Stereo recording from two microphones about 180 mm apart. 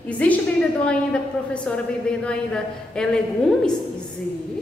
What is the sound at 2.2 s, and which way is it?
A woman's voice, 5° left (ahead or behind).